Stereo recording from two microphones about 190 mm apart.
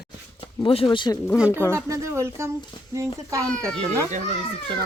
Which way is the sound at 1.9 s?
15° right (ahead or behind).